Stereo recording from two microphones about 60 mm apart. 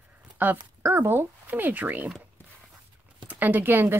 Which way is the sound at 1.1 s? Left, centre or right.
Right.